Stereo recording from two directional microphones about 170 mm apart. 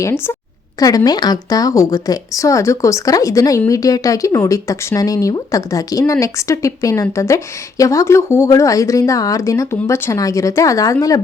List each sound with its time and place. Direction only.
0.0 s a woman's voice: 15° left (ahead or behind)